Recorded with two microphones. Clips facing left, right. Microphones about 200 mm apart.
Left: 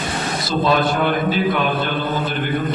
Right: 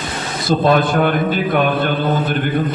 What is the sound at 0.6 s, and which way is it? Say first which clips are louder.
A man's voice: right 2 dB; 50° right (ahead or behind).